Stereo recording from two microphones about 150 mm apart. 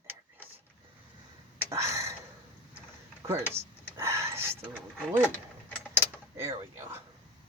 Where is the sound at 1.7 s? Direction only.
20° right (ahead or behind).